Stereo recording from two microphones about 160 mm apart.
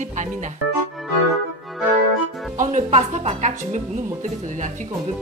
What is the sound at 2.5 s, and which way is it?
Speech, 45° right (ahead or behind).